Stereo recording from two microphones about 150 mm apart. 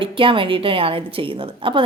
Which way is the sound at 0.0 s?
35° right (ahead or behind).